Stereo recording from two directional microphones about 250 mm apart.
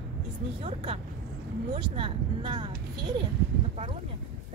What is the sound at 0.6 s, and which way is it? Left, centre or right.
Speech, right.